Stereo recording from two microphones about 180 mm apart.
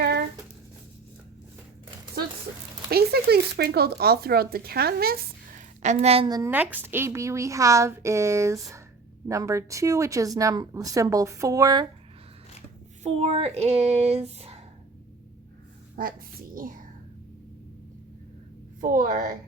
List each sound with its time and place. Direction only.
2.9 s speech: 60° right (ahead or behind)
5.8 s speech: 40° right (ahead or behind); by 6.5 s 20° right (ahead or behind)
6.5 s speech: 10° right (ahead or behind)
13.0 s speech: 35° right (ahead or behind)
16.0 s a woman's voice: 50° right (ahead or behind)
18.8 s a woman's voice: 50° right (ahead or behind)